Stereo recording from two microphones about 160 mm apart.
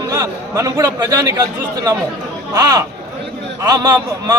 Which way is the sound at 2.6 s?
25° right (ahead or behind).